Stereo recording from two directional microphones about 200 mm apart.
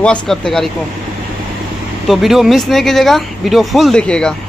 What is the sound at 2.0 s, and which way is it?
Speech, centre (ahead or behind).